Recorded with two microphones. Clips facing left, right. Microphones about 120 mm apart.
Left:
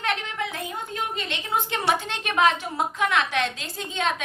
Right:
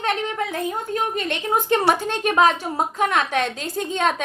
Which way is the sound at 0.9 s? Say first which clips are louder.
Right 5 dB; 50° right (ahead or behind).